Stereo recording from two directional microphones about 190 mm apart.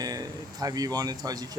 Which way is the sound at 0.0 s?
20° right (ahead or behind).